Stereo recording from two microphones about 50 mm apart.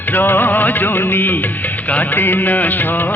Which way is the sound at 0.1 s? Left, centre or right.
Left.